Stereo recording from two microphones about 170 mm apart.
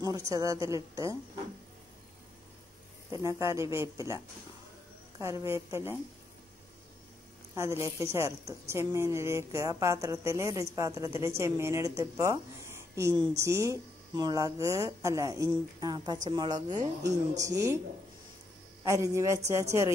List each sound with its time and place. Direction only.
0.0 s a woman's voice: 20° right (ahead or behind)
3.1 s a woman's voice: 20° right (ahead or behind)
5.2 s a woman's voice: 15° right (ahead or behind)
7.5 s a woman's voice: 15° right (ahead or behind)
18.9 s a woman's voice: 15° right (ahead or behind)